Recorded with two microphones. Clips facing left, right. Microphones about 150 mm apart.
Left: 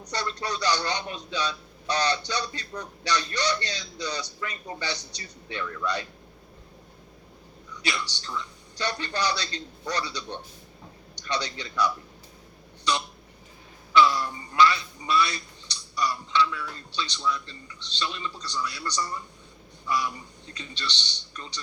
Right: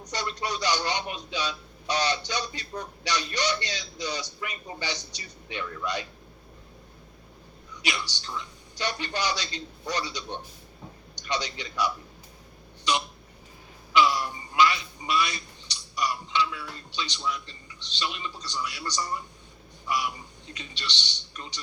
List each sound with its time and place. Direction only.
0.1 s a man's voice: 15° right (ahead or behind)
7.8 s a man's voice: 15° right (ahead or behind)
13.9 s a man's voice: 15° right (ahead or behind)